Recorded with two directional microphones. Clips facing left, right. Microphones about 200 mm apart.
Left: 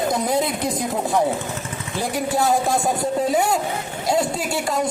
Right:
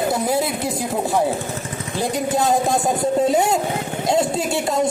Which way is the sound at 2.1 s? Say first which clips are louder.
Right 1 dB; 20° right (ahead or behind).